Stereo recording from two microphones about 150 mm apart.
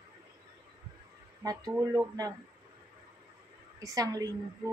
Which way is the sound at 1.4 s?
25° right (ahead or behind).